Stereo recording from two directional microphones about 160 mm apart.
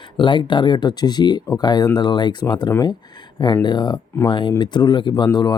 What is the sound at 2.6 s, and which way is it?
Speech, 15° left (ahead or behind).